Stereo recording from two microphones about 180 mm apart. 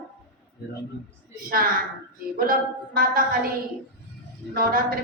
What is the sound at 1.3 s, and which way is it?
A woman's voice, 50° right (ahead or behind).